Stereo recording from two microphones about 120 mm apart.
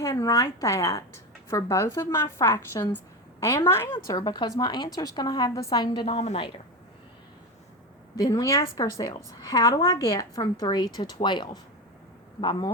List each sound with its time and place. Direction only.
0.0 s a woman's voice: 30° left (ahead or behind)
4.0 s a woman's voice: 30° left (ahead or behind)
8.1 s a woman's voice: 30° left (ahead or behind)